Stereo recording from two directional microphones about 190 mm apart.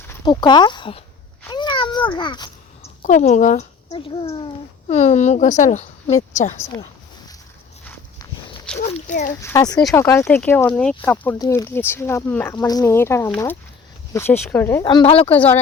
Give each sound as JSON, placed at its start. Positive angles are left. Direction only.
{"t": 0.3, "sound": "speech", "side_deg": 25}
{"t": 1.5, "sound": "a sound", "side_deg": 25}
{"t": 3.0, "sound": "speech", "side_deg": 40}
{"t": 3.8, "sound": "a child's voice", "side_deg": 25}
{"t": 6.6, "sound": "speech", "side_deg": 20}
{"t": 8.9, "sound": "speech", "side_deg": 40}
{"t": 9.4, "sound": "speech", "side_deg": 15}
{"t": 14.8, "sound": "speech", "side_deg": 25}
{"t": 15.3, "sound": "speech", "side_deg": 10}